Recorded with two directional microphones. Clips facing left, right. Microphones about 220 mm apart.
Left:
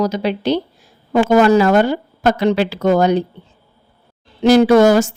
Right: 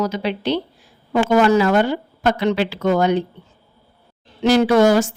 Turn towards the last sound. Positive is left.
turn(degrees=45)  # may be behind; listen again after turning